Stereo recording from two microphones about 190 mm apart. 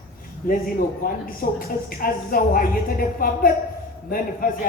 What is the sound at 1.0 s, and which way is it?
A woman's voice, 50° left (ahead or behind).